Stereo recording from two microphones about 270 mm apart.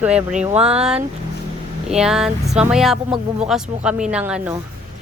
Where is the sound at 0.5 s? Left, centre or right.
Right.